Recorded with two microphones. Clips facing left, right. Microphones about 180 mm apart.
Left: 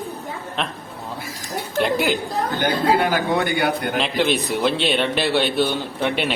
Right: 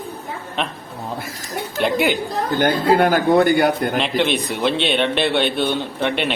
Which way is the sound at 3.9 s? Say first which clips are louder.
Right 1 dB; centre (ahead or behind).